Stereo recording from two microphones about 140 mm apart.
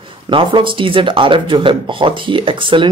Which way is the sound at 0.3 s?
40° right (ahead or behind).